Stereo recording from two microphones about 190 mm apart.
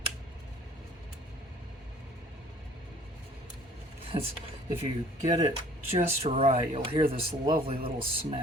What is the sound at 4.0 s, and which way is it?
Vehicle, 30° right (ahead or behind).